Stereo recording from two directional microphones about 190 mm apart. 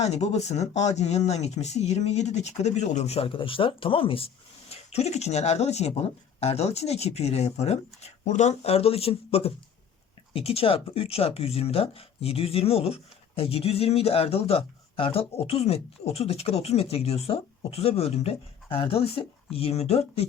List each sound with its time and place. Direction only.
0.0 s speech: 35° left (ahead or behind)